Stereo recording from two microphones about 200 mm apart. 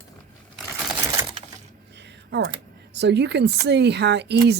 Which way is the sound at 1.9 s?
60° right (ahead or behind).